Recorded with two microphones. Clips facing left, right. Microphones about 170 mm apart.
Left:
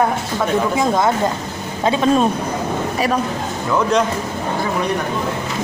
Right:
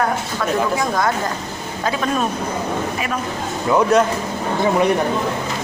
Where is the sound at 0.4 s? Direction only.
25° left (ahead or behind).